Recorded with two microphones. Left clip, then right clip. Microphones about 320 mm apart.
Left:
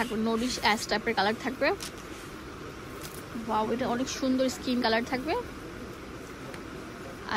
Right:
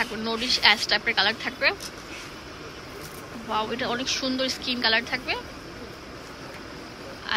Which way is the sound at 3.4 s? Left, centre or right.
Centre.